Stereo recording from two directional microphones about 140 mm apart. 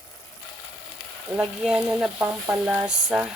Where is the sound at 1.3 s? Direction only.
5° right (ahead or behind).